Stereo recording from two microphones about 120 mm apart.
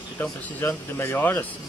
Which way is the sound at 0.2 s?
20° left (ahead or behind).